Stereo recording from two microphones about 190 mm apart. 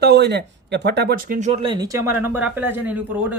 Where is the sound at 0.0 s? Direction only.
60° right (ahead or behind); by 1.7 s 35° right (ahead or behind).